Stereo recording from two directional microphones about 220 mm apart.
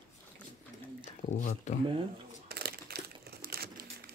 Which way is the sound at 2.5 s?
45° right (ahead or behind).